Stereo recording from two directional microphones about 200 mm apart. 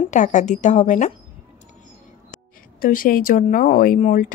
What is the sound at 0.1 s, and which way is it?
Speech, 40° left (ahead or behind).